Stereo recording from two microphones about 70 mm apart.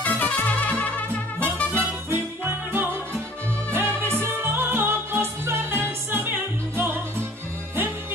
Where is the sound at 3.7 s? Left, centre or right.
Right.